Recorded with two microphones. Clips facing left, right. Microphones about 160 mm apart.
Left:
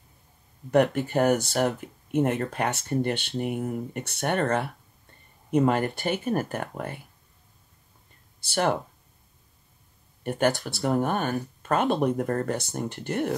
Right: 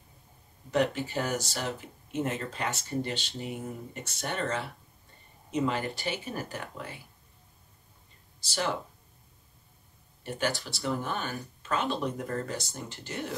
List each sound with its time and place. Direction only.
0.7 s speech: 55° left (ahead or behind)
8.4 s speech: 60° left (ahead or behind)
10.2 s speech: 55° left (ahead or behind)